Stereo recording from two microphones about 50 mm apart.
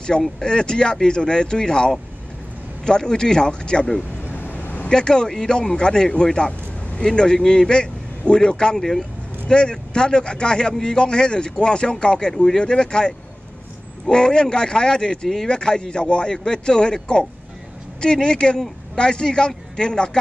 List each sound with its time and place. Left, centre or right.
0.4 s a man's voice: centre
4.2 s vehicle: left
4.8 s a man's voice: centre
8.7 s speech: centre
9.5 s a man's voice: centre